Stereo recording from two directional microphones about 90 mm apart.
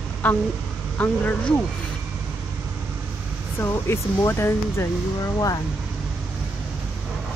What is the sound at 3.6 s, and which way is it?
Speech, 30° left (ahead or behind).